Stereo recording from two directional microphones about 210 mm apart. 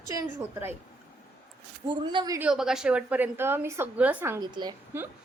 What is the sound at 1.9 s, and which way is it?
Speech, 20° right (ahead or behind).